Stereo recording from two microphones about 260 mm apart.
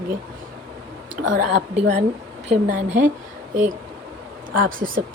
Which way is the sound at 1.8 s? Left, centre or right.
Right.